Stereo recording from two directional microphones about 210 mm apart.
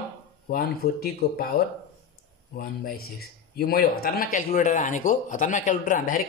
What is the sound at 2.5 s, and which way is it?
A man's voice, 45° left (ahead or behind).